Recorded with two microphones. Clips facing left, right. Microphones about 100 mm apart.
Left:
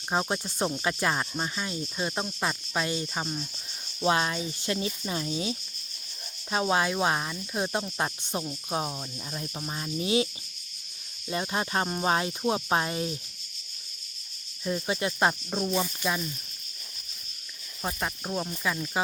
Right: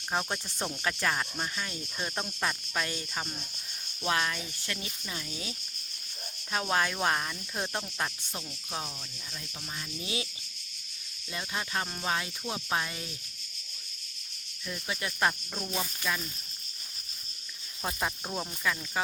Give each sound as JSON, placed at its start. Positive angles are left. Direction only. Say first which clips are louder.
{"t": 0.1, "sound": "cricket", "louder": "left 4 dB", "side_deg": 15}
{"t": 4.0, "sound": "speech", "louder": "left 5 dB", "side_deg": 25}
{"t": 6.5, "sound": "cricket", "louder": "left 4 dB", "side_deg": 15}
{"t": 7.9, "sound": "speech", "louder": "left 5 dB", "side_deg": 25}
{"t": 11.3, "sound": "speech", "louder": "left 6 dB", "side_deg": 35}
{"t": 14.6, "sound": "speech", "louder": "left 8 dB", "side_deg": 30}
{"t": 17.8, "sound": "speech", "louder": "left 1 dB", "side_deg": 0}
{"t": 18.6, "sound": "cricket", "louder": "left 1 dB", "side_deg": 15}